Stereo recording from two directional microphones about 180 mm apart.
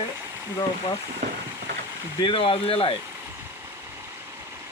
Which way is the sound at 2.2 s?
30° left (ahead or behind).